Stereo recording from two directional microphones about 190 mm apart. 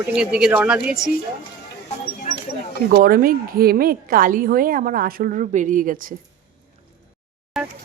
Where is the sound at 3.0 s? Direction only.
50° right (ahead or behind).